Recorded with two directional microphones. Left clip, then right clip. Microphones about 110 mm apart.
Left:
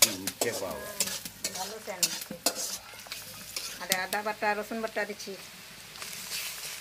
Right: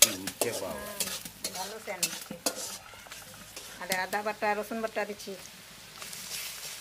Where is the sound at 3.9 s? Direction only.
20° right (ahead or behind).